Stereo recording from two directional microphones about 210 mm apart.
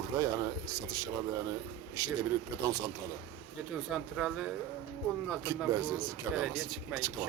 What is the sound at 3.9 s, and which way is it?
Speech, centre (ahead or behind).